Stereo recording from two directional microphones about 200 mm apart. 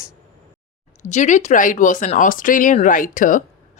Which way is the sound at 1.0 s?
35° left (ahead or behind).